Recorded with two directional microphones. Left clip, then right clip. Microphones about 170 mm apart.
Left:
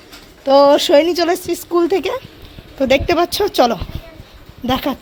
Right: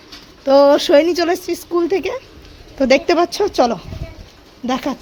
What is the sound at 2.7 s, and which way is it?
A woman's voice, 25° right (ahead or behind).